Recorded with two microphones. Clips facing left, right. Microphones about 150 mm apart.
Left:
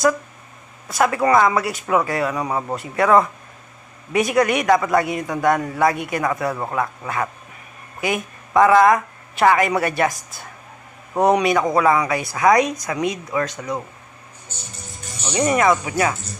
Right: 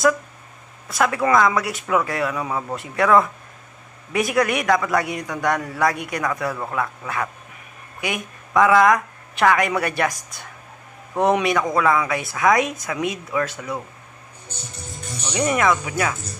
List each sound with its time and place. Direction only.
0.8 s speech: centre (ahead or behind)
2.3 s speech: 20° left (ahead or behind)
2.7 s speech: centre (ahead or behind)
8.0 s a sound: centre (ahead or behind)
8.7 s speech: 25° left (ahead or behind)
9.3 s a man's voice: centre (ahead or behind)
13.6 s speech: 15° left (ahead or behind)
15.3 s speech: centre (ahead or behind)